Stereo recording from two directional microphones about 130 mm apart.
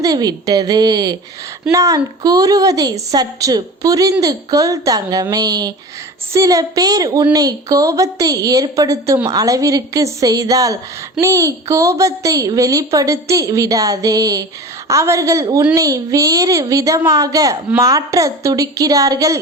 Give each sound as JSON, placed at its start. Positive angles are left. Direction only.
{"t": 0.0, "sound": "a woman's voice", "side_deg": -30}